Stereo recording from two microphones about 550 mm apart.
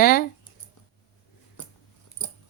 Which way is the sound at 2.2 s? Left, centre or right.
Left.